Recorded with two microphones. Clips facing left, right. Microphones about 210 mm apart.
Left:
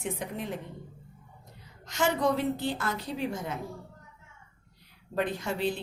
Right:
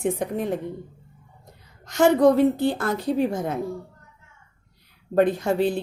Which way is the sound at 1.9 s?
55° right (ahead or behind).